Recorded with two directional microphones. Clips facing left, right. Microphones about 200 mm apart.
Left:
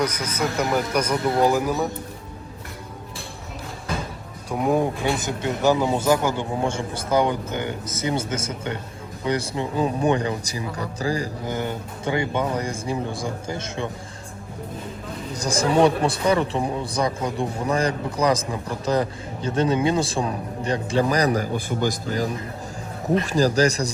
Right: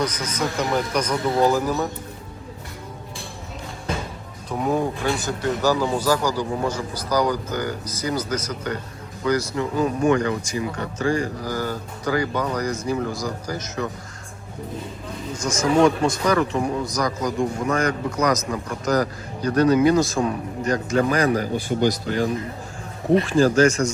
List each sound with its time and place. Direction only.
0.0 s a man's voice: 10° left (ahead or behind)
4.4 s speech: 10° left (ahead or behind); by 11.3 s 35° left (ahead or behind)
11.4 s speech: 25° left (ahead or behind)
15.3 s speech: 35° left (ahead or behind)
21.5 s a man's voice: 50° left (ahead or behind)
23.2 s speech: 40° left (ahead or behind)